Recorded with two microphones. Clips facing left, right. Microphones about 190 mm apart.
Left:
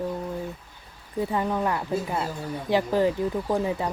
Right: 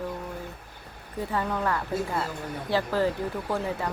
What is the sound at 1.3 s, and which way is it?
Speech, 15° left (ahead or behind).